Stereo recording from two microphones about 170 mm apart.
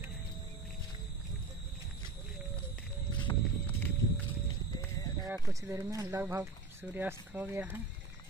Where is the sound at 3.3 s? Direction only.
25° left (ahead or behind).